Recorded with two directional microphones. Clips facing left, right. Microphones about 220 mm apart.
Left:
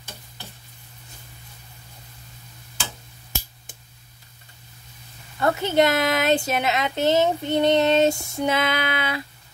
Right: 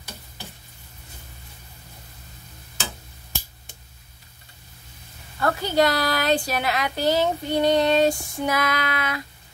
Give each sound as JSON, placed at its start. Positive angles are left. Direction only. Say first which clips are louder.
{"t": 5.4, "sound": "speech", "louder": "left 1 dB", "side_deg": 25}